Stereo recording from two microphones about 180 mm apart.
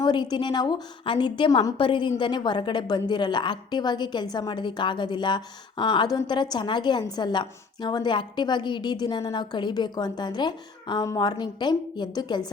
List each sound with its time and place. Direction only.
0.0 s a woman's voice: 25° left (ahead or behind)